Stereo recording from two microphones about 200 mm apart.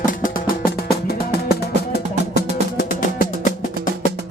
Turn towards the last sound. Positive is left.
turn(degrees=50)  # may be behind; listen again after turning